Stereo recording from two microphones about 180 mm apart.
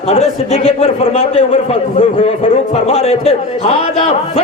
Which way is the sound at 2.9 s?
35° left (ahead or behind).